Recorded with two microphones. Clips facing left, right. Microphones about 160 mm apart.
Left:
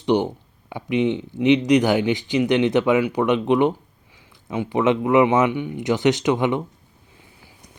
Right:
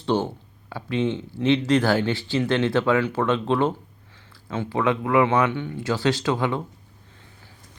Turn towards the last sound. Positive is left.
turn(degrees=10)  # may be behind; listen again after turning